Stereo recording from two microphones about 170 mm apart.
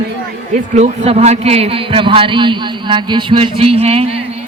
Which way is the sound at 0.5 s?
45° right (ahead or behind).